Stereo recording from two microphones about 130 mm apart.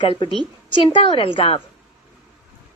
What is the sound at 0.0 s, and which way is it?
A woman's voice, 40° left (ahead or behind).